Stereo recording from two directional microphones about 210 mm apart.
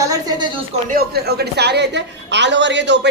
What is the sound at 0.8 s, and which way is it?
A woman's voice, 45° right (ahead or behind).